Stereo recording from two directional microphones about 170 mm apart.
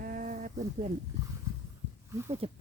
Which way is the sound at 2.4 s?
35° right (ahead or behind).